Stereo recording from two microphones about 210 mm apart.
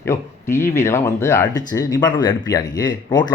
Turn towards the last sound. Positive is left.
turn(degrees=20)  # may be behind; listen again after turning